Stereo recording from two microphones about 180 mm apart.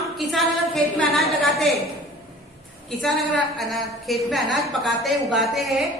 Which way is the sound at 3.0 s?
Centre (ahead or behind).